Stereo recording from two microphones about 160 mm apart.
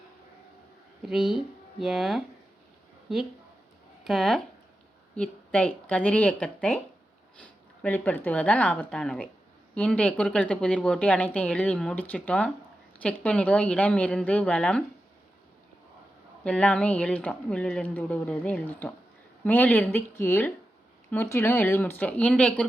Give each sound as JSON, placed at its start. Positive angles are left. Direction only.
{"t": 1.0, "sound": "a woman's voice", "side_deg": 0}
{"t": 16.4, "sound": "a woman's voice", "side_deg": 5}